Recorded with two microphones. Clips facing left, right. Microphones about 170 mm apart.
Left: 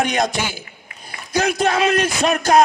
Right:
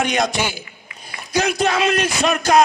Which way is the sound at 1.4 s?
50° left (ahead or behind).